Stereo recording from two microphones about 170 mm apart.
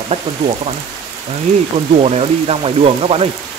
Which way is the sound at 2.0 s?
35° right (ahead or behind).